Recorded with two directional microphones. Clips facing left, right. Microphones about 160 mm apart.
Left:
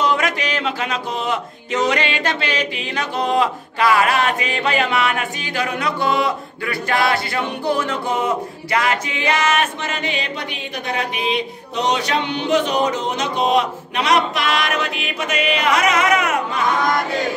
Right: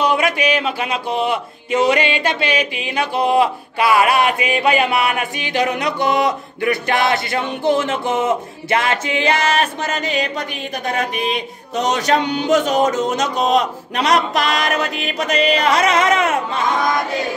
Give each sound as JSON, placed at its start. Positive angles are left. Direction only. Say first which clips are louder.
{"t": 0.0, "sound": "a sound", "louder": "right 3 dB", "side_deg": -10}
{"t": 1.7, "sound": "music", "louder": "right 4 dB", "side_deg": -10}
{"t": 5.6, "sound": "speech", "louder": "right 3 dB", "side_deg": -40}
{"t": 6.6, "sound": "music", "louder": "right 3 dB", "side_deg": -20}
{"t": 11.0, "sound": "speech", "louder": "left 1 dB", "side_deg": -45}